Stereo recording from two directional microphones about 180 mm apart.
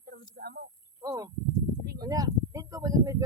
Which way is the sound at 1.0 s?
20° right (ahead or behind).